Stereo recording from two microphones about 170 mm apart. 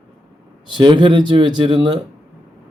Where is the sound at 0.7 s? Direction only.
30° right (ahead or behind).